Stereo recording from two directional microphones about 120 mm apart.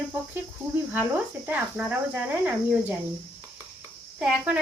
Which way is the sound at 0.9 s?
15° right (ahead or behind).